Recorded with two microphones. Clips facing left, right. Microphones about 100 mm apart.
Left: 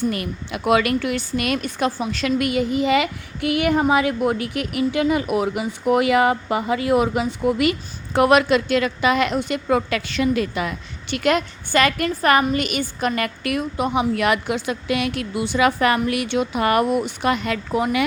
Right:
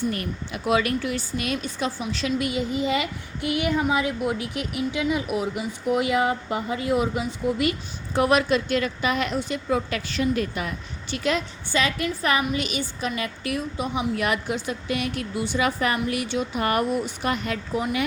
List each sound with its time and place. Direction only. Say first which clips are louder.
0.1 s a woman's voice: left 3 dB; 85° left
16.0 s speech: left 4 dB; 75° left (ahead or behind); by 17.8 s 90° left